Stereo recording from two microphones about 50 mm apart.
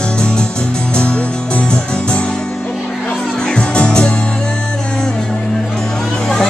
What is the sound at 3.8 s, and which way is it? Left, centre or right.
Music, centre.